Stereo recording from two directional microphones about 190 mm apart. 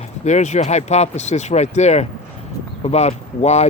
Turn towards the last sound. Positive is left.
turn(degrees=35)  # may be behind; listen again after turning